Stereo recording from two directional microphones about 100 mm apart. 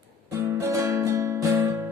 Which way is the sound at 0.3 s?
30° right (ahead or behind).